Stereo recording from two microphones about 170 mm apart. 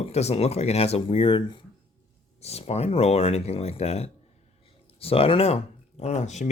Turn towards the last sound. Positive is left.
turn(degrees=45)  # may be behind; listen again after turning